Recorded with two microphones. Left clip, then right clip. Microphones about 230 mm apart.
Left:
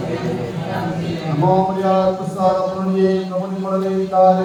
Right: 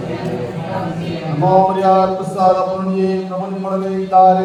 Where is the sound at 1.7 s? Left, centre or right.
Right.